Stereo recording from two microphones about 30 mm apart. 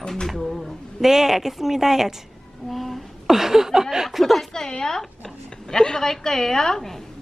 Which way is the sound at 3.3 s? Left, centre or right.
Centre.